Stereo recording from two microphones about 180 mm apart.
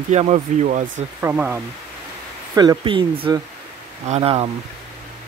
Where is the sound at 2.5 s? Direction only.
25° right (ahead or behind).